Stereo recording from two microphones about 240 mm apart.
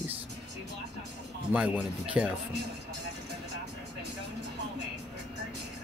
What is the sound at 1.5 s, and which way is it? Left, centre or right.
Speech, centre.